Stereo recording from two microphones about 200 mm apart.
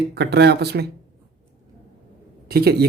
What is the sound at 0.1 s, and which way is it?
Speech, 55° right (ahead or behind).